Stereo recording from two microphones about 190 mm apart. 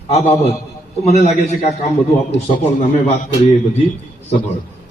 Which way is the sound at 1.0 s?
35° left (ahead or behind).